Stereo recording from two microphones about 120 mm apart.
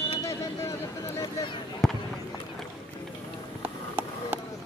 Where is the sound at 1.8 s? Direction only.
5° left (ahead or behind).